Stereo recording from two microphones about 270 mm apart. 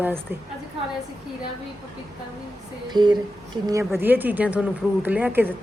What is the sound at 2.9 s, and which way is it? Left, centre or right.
A woman's voice, centre.